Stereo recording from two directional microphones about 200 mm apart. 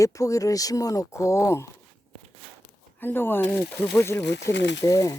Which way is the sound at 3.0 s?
10° left (ahead or behind).